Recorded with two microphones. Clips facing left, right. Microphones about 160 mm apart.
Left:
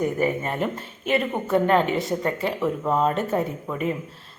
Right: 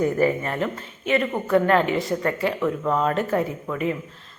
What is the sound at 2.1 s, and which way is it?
A woman's voice, 15° left (ahead or behind).